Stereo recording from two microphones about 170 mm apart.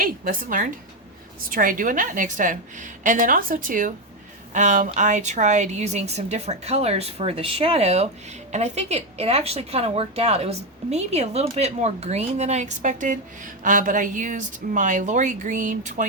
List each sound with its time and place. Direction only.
0.0 s a woman's voice: 55° right (ahead or behind)